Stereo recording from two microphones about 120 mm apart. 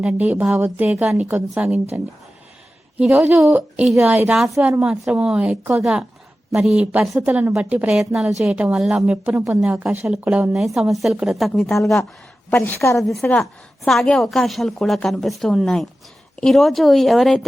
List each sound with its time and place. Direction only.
0.0 s a woman's voice: 10° right (ahead or behind)
3.0 s a woman's voice: 5° right (ahead or behind)
4.1 s a woman's voice: 15° right (ahead or behind); by 12.0 s centre (ahead or behind)
12.6 s a woman's voice: 20° left (ahead or behind)
13.0 s a woman's voice: centre (ahead or behind)